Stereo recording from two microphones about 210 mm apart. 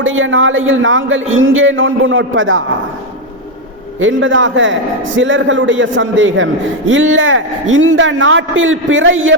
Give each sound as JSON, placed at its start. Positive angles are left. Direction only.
{"t": 0.0, "sound": "a man's voice", "side_deg": -65}
{"t": 4.0, "sound": "a man's voice", "side_deg": -65}